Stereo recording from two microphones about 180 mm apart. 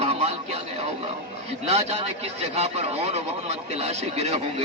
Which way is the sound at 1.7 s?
35° right (ahead or behind).